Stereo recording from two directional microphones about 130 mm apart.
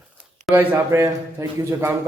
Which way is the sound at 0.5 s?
20° right (ahead or behind).